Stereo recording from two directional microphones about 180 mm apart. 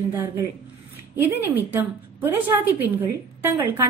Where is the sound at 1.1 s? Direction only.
10° right (ahead or behind).